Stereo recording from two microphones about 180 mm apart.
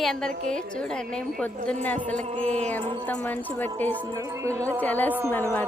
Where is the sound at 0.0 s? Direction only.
Centre (ahead or behind).